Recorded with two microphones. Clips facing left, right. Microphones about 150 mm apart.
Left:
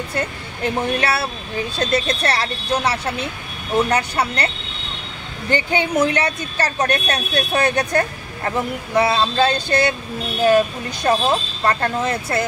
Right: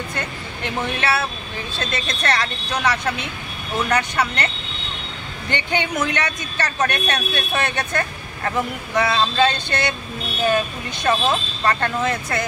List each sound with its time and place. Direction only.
0.1 s a woman's voice: 35° left (ahead or behind)
5.5 s a woman's voice: 35° left (ahead or behind)
11.0 s a woman's voice: 35° left (ahead or behind)